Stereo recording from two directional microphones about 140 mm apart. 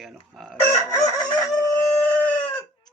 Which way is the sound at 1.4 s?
20° left (ahead or behind).